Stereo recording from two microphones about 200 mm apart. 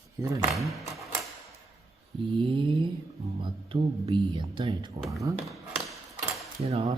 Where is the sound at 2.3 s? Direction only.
25° right (ahead or behind).